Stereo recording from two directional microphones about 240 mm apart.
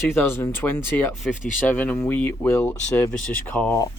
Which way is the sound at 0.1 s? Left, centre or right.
Centre.